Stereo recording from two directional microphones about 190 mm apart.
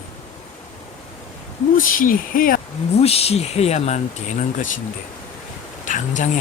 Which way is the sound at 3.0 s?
30° left (ahead or behind).